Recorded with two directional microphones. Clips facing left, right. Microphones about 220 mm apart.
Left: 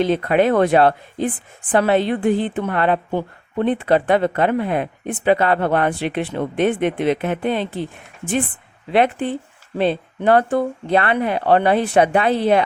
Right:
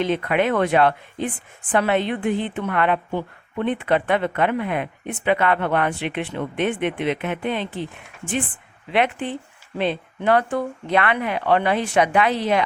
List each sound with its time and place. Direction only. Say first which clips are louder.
0.0 s a woman's voice: left 4 dB; 35° left (ahead or behind)
8.9 s a woman's voice: left 4 dB; 35° left (ahead or behind)